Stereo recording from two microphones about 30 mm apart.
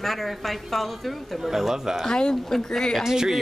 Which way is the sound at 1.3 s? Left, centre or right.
Centre.